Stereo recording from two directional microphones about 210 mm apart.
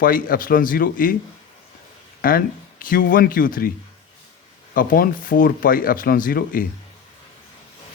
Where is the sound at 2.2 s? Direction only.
45° left (ahead or behind).